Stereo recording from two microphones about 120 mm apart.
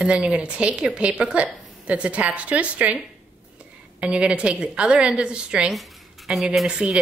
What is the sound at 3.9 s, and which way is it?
A woman's voice, 10° right (ahead or behind).